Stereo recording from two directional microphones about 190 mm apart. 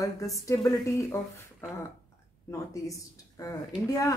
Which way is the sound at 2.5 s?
15° left (ahead or behind).